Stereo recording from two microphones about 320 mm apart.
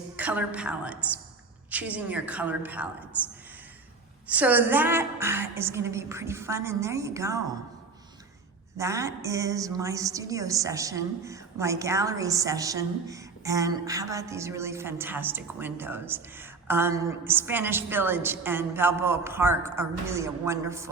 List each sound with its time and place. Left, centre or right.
0.2 s a woman's voice: centre
8.8 s a woman's voice: centre